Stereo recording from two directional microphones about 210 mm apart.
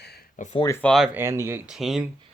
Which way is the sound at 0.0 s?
50° left (ahead or behind).